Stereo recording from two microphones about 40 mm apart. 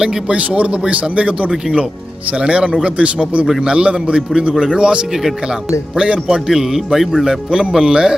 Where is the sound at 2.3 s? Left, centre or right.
Right.